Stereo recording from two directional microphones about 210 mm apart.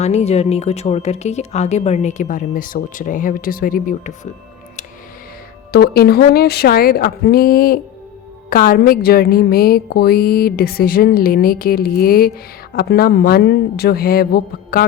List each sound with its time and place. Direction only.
0.0 s speech: 30° left (ahead or behind)
5.7 s music: 45° left (ahead or behind)